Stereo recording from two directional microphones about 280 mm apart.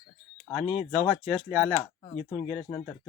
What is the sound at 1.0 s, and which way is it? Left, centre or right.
Speech, centre.